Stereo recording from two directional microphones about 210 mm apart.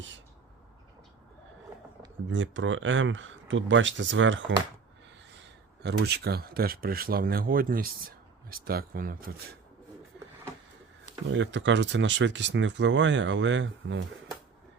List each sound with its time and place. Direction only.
2.3 s speech: 60° right (ahead or behind)
5.8 s speech: 50° right (ahead or behind)
11.3 s speech: 60° right (ahead or behind)